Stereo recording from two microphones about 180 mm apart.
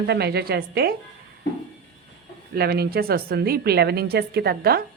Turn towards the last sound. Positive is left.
turn(degrees=-60)  # may be behind; listen again after turning